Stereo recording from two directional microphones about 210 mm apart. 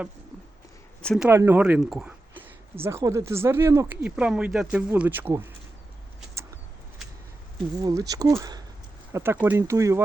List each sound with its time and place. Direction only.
1.0 s speech: centre (ahead or behind)
1.3 s speech: 10° right (ahead or behind)
7.8 s speech: 20° right (ahead or behind)